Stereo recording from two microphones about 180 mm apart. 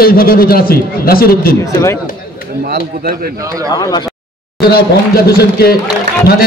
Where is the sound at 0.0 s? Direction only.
55° left (ahead or behind).